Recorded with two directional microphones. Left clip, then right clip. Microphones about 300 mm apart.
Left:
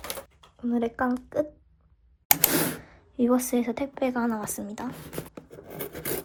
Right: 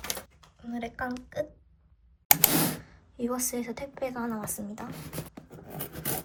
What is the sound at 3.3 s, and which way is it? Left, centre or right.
A woman's voice, left.